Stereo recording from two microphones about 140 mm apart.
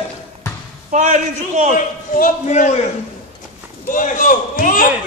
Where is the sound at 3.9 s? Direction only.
70° left (ahead or behind).